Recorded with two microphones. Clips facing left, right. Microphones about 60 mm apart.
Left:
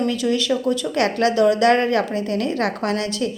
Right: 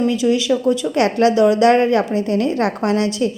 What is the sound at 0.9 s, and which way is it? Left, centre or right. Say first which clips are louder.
A woman's voice: right 3 dB; right.